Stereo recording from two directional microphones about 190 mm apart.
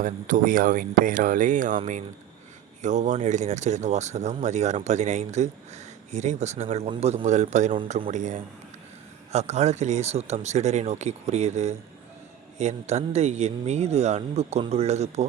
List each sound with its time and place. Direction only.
0.0 s speech: 45° right (ahead or behind)